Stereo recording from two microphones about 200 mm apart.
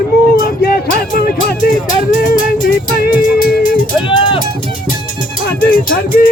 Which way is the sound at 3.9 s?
25° left (ahead or behind).